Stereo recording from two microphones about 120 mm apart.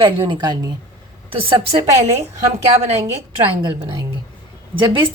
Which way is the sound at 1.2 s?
50° right (ahead or behind).